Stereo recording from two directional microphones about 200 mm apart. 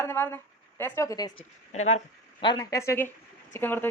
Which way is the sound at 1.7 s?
35° left (ahead or behind).